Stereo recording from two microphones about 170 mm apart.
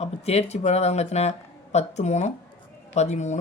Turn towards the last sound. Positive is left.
turn(degrees=45)  # may be behind; listen again after turning